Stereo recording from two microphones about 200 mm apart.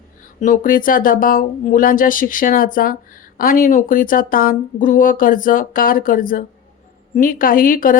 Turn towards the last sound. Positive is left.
turn(degrees=45)  # may be behind; listen again after turning